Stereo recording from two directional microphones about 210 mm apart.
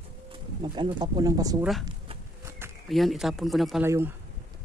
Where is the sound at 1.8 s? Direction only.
15° right (ahead or behind).